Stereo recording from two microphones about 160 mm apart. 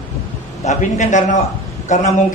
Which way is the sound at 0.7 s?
50° left (ahead or behind).